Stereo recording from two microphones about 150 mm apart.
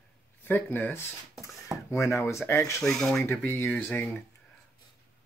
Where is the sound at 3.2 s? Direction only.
15° left (ahead or behind).